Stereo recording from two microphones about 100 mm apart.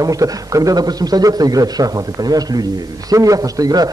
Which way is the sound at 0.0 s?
35° right (ahead or behind).